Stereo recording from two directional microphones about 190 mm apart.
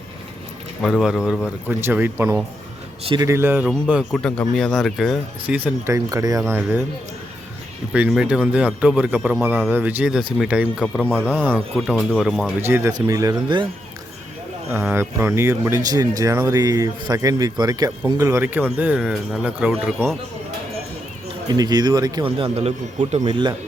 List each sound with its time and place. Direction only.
0.8 s speech: centre (ahead or behind)
3.0 s a man's voice: 30° right (ahead or behind)
3.2 s speech: 10° right (ahead or behind)
7.9 s speech: 5° right (ahead or behind)
11.0 s a man's voice: 5° left (ahead or behind)
12.6 s a man's voice: 10° right (ahead or behind)
14.7 s speech: 10° right (ahead or behind)
21.5 s a man's voice: 20° right (ahead or behind)